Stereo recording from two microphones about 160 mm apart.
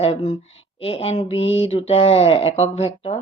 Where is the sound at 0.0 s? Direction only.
35° left (ahead or behind).